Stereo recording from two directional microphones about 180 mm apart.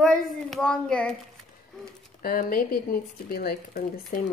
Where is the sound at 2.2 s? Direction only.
55° left (ahead or behind).